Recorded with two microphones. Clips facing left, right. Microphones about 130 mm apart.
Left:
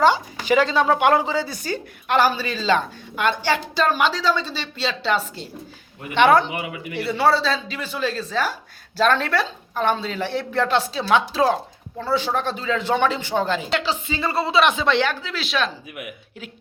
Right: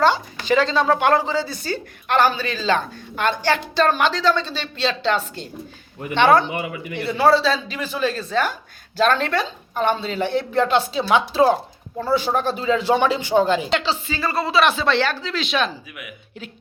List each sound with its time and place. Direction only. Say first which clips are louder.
0.0 s a woman's voice: left 1 dB; 10° left (ahead or behind)
6.9 s speech: right 2 dB; 5° left (ahead or behind); by 13.7 s 15° right (ahead or behind)
13.7 s speech: right 2 dB; 5° left (ahead or behind)
13.9 s a woman's voice: even; 20° left (ahead or behind); by 15.7 s centre (ahead or behind)